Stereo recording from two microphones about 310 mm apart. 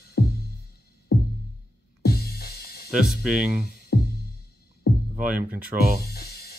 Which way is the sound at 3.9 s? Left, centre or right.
Left.